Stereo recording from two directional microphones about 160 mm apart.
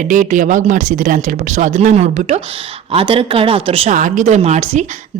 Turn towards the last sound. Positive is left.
turn(degrees=-45)  # may be behind; listen again after turning